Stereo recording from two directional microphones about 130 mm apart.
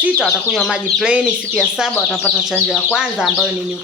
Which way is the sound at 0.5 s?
5° right (ahead or behind).